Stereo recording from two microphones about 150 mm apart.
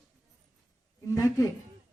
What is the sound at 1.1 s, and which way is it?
Speech, 20° left (ahead or behind).